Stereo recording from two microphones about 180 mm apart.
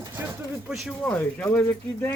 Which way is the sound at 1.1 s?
10° left (ahead or behind).